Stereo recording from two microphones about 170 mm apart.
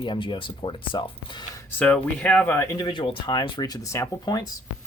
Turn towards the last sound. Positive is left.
turn(degrees=20)  # may be behind; listen again after turning